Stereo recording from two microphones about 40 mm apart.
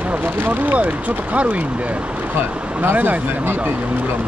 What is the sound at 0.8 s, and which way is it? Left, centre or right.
Speech, right.